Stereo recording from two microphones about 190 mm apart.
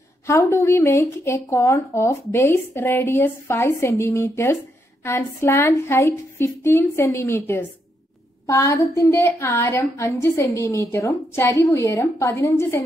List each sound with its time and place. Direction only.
0.3 s a woman's voice: 15° left (ahead or behind)